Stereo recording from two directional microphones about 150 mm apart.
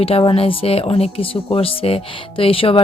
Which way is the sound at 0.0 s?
40° left (ahead or behind).